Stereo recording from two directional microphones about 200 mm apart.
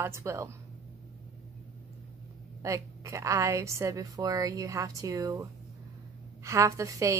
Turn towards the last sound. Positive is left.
turn(degrees=-15)  # may be behind; listen again after turning